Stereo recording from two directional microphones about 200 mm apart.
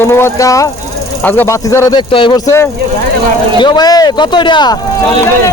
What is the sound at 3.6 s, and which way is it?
A man's voice, 20° left (ahead or behind).